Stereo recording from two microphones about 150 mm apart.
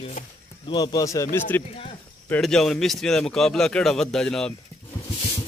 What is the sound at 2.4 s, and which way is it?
Speech, 5° left (ahead or behind).